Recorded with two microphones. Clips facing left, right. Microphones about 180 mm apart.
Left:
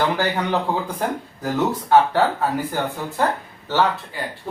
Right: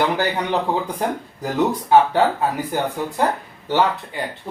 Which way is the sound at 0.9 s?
15° right (ahead or behind).